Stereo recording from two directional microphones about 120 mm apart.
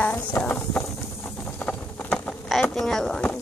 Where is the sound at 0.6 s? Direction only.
5° left (ahead or behind).